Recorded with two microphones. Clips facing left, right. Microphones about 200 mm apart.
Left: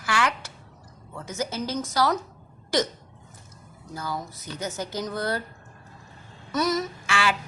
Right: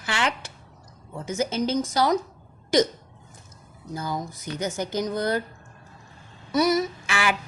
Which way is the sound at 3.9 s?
20° right (ahead or behind).